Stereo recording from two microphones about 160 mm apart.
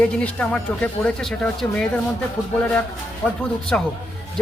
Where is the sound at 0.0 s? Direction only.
10° left (ahead or behind).